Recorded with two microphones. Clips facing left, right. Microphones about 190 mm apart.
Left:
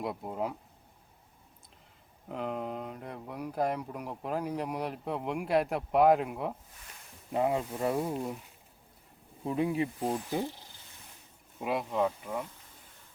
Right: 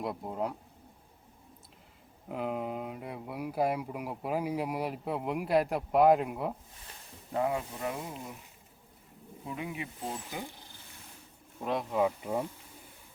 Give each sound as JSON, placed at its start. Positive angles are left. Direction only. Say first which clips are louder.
{"t": 0.0, "sound": "speech", "louder": "even", "side_deg": 0}
{"t": 2.3, "sound": "speech", "louder": "right 1 dB", "side_deg": -5}
{"t": 7.3, "sound": "speech", "louder": "left 2 dB", "side_deg": 25}
{"t": 7.8, "sound": "speech", "louder": "left 6 dB", "side_deg": 35}
{"t": 9.5, "sound": "speech", "louder": "left 9 dB", "side_deg": 35}
{"t": 11.6, "sound": "speech", "louder": "right 1 dB", "side_deg": 5}
{"t": 12.2, "sound": "bee", "louder": "right 4 dB", "side_deg": -25}